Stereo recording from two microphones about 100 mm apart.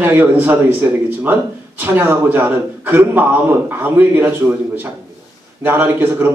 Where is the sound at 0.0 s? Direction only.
20° right (ahead or behind).